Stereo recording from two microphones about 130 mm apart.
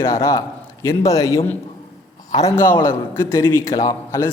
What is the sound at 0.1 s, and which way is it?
A man's voice, 25° left (ahead or behind).